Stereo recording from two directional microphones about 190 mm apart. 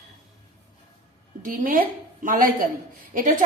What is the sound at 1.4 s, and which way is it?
A woman's voice, 45° right (ahead or behind).